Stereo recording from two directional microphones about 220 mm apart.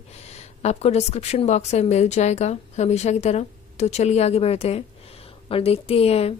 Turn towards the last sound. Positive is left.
turn(degrees=25)  # may be behind; listen again after turning